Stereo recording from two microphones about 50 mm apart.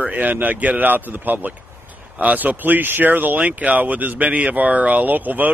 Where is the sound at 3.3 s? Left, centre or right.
Right.